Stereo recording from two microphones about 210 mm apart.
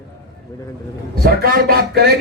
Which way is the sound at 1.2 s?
45° right (ahead or behind).